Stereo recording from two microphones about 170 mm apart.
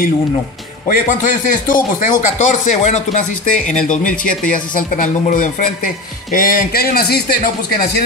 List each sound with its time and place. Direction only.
0.8 s a man's voice: 50° left (ahead or behind)